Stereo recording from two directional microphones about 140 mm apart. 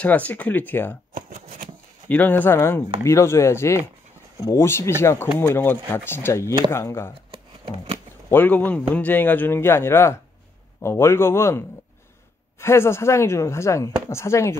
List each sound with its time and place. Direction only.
0.0 s a man's voice: 10° left (ahead or behind)
1.1 s shuffling cards: 80° right
2.0 s a man's voice: 10° left (ahead or behind)
3.0 s chopping: 20° left (ahead or behind)
4.5 s a man's voice: 20° left (ahead or behind)
6.7 s chopping: 20° left (ahead or behind)
8.3 s a man's voice: 10° left (ahead or behind)
10.8 s chopping: 20° left (ahead or behind)